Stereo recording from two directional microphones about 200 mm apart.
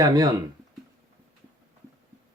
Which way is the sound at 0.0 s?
20° right (ahead or behind).